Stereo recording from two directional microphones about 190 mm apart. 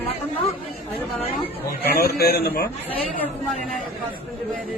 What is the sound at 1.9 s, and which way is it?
Speech, 55° left (ahead or behind).